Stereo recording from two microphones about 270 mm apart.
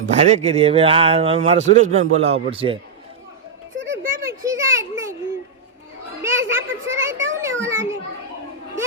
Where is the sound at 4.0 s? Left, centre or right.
Right.